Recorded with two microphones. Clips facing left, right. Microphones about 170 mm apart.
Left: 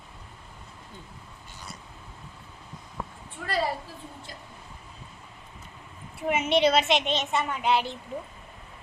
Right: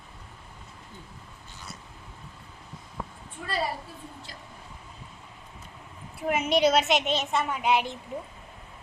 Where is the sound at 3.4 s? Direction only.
65° left (ahead or behind).